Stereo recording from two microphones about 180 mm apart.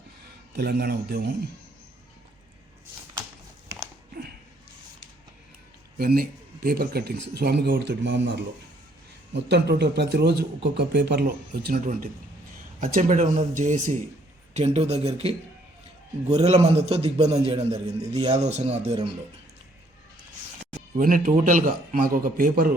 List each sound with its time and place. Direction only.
0.5 s speech: 60° right (ahead or behind)
6.0 s a man's voice: 60° right (ahead or behind); by 18.3 s 30° right (ahead or behind)
18.3 s a man's voice: 40° right (ahead or behind)
20.7 s speech: 50° right (ahead or behind)